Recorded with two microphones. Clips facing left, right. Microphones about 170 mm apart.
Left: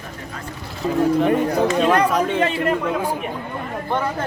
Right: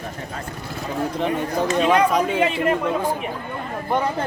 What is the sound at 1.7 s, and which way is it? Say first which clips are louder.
Speech: even; 5° right (ahead or behind).